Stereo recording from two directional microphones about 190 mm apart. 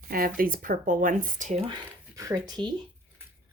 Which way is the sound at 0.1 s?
50° right (ahead or behind).